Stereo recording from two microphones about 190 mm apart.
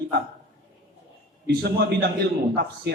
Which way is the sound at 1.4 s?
60° right (ahead or behind).